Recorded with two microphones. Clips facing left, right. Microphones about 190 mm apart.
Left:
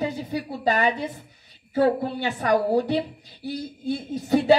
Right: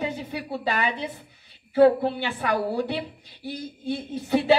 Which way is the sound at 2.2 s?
40° left (ahead or behind).